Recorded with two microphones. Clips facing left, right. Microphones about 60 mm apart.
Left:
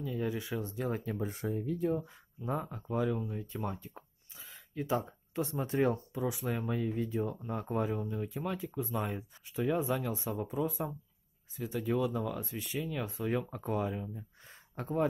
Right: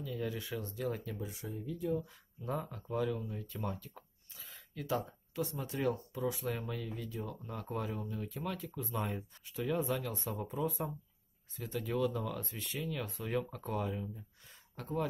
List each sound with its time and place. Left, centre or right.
0.0 s speech: left
1.1 s speech: left
2.0 s speech: centre
6.2 s speech: centre
6.6 s speech: left
8.8 s speech: centre; by 15.0 s left